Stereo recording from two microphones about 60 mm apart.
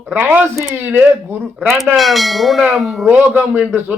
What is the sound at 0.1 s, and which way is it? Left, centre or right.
Speech, right.